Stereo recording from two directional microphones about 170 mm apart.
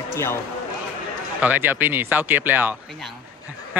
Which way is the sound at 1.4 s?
10° right (ahead or behind).